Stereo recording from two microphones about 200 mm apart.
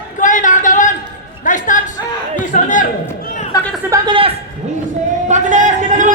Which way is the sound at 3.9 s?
25° right (ahead or behind).